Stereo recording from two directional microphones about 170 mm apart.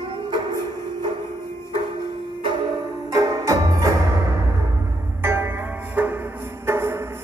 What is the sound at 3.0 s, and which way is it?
Music, 20° right (ahead or behind).